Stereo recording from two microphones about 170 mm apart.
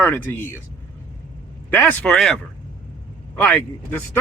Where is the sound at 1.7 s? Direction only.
10° left (ahead or behind).